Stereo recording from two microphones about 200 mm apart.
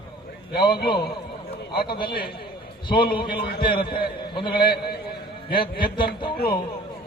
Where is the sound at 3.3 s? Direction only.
50° left (ahead or behind).